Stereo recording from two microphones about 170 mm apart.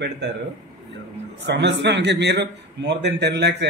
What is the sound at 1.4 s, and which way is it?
Speech, 90° right.